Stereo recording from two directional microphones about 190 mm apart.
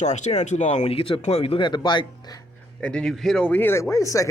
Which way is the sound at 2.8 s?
5° left (ahead or behind).